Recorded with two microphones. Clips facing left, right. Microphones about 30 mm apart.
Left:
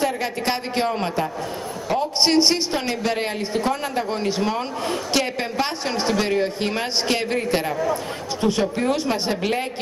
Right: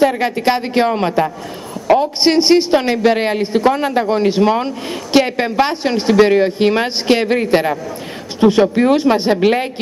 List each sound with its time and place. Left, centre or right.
0.0 s a man's voice: right